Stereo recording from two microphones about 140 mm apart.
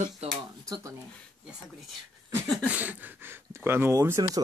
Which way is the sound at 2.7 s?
10° right (ahead or behind).